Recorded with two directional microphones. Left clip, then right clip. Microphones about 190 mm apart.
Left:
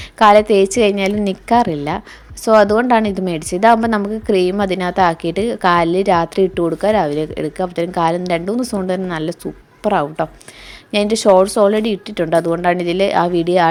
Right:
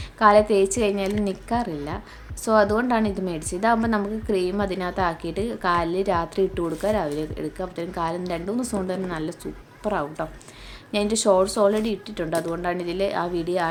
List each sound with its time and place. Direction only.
0.2 s a woman's voice: 35° left (ahead or behind)